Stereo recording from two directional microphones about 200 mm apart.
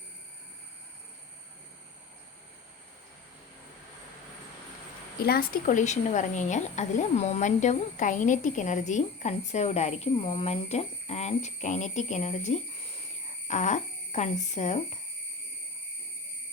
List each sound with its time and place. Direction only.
5.2 s speech: 50° left (ahead or behind)